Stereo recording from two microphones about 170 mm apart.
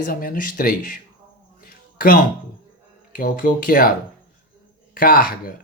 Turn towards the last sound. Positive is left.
turn(degrees=60)  # may be behind; listen again after turning